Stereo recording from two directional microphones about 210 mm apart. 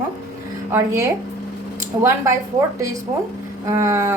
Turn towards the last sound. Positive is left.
turn(degrees=-10)  # may be behind; listen again after turning